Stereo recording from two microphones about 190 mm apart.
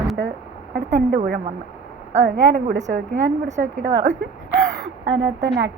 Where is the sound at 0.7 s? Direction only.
65° right (ahead or behind).